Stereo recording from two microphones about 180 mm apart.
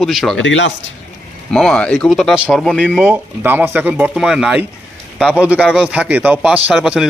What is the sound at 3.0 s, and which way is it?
A man's voice, 10° right (ahead or behind).